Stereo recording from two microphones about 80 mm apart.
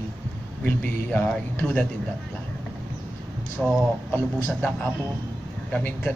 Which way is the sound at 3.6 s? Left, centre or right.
Centre.